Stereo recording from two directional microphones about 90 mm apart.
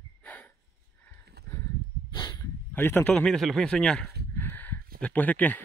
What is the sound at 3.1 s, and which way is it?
Speech, 5° left (ahead or behind).